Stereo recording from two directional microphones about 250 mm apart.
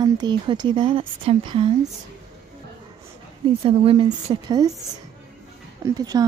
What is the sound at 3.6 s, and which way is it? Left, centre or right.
Speech, right.